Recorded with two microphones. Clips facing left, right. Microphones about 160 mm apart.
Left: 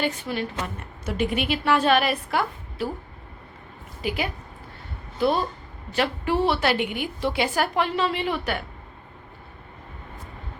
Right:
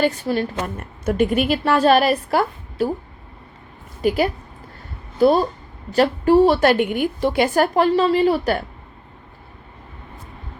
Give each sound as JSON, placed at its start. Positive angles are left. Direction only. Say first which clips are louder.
{"t": 0.0, "sound": "a woman's voice", "louder": "right 7 dB", "side_deg": -40}
{"t": 4.0, "sound": "a woman's voice", "louder": "right 9 dB", "side_deg": -40}